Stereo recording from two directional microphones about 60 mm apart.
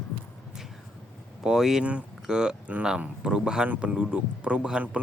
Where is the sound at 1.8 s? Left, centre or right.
Right.